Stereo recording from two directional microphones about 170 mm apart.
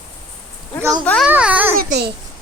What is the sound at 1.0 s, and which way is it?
Speech, 5° left (ahead or behind).